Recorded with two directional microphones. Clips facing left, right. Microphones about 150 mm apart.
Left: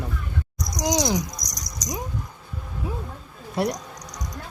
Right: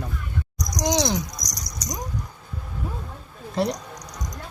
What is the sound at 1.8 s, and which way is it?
Speech, 60° right (ahead or behind).